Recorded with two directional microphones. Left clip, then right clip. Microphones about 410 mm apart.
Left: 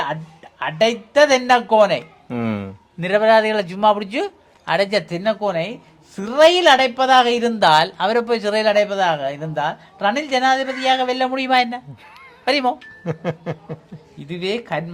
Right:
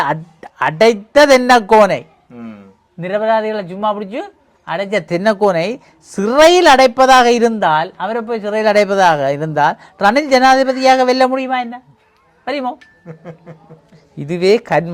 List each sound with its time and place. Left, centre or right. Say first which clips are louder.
0.0 s speech: right 7 dB; right
2.3 s speech: left 10 dB; left
3.0 s a man's voice: left 1 dB; right
4.9 s speech: right 6 dB; right
7.6 s a man's voice: even; right
8.6 s speech: right 8 dB; right
11.3 s a man's voice: left 1 dB; right
13.1 s speech: left 10 dB; left
14.3 s speech: right 11 dB; right